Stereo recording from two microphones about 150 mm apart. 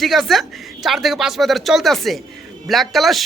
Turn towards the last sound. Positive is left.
turn(degrees=0)  # may be behind; listen again after turning